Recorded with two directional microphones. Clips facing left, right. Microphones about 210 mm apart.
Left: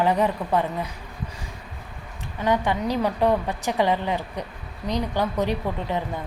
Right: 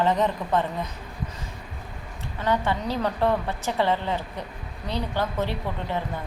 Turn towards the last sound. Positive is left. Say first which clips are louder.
# left 2 dB
turn(degrees=15)  # may be behind; listen again after turning